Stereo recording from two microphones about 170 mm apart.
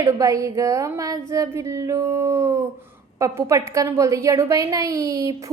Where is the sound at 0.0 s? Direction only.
20° right (ahead or behind).